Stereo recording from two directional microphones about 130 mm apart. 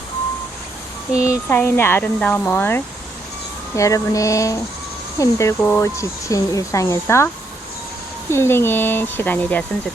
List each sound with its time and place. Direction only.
1.3 s speech: 20° left (ahead or behind)
8.3 s speech: 20° left (ahead or behind)